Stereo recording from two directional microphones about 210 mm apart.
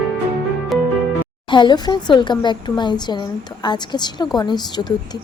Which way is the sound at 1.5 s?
20° left (ahead or behind).